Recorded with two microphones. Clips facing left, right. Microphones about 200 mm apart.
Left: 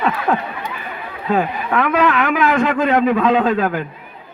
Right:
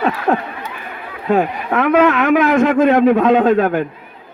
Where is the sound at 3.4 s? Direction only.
25° right (ahead or behind).